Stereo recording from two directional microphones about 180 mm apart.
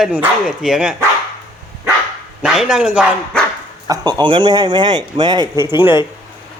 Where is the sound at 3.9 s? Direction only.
25° right (ahead or behind).